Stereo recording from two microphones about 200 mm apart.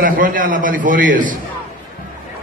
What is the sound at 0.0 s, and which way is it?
A man's voice, 45° right (ahead or behind).